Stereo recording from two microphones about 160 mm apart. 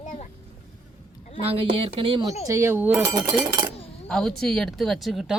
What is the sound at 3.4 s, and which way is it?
Speech, 25° right (ahead or behind).